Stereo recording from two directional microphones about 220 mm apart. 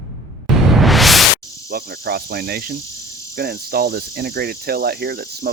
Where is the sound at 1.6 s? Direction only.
45° right (ahead or behind).